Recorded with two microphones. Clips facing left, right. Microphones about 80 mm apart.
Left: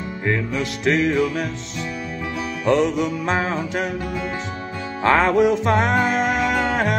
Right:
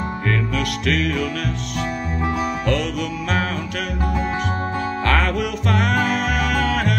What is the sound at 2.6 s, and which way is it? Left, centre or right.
Music, left.